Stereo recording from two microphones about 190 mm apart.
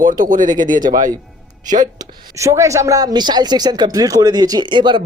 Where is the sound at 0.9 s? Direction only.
45° right (ahead or behind).